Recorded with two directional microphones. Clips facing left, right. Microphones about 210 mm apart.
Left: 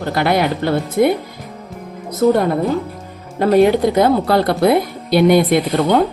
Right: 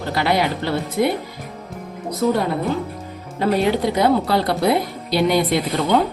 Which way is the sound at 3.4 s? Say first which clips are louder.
Left 6 dB; 50° left (ahead or behind).